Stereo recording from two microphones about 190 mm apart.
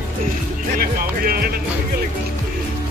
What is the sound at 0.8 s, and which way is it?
Music, 50° right (ahead or behind).